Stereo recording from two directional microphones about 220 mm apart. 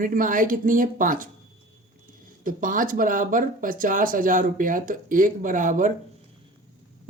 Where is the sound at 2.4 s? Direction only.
40° right (ahead or behind).